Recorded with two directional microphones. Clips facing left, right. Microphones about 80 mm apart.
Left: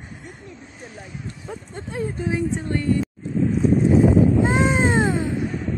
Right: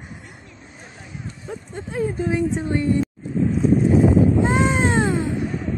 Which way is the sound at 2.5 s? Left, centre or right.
Centre.